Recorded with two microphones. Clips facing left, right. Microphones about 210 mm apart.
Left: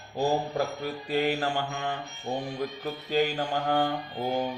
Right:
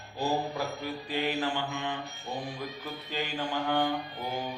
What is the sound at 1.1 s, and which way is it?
Music, 45° left (ahead or behind).